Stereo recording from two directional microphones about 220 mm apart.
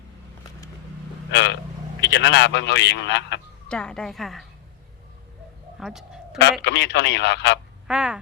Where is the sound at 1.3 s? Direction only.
50° left (ahead or behind).